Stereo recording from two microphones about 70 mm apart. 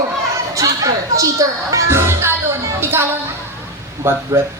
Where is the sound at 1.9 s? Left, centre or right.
Right.